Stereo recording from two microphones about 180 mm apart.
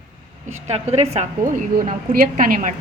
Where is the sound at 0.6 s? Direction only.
35° right (ahead or behind).